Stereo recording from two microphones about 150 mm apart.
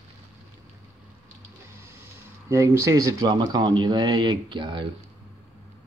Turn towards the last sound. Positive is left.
turn(degrees=-30)  # may be behind; listen again after turning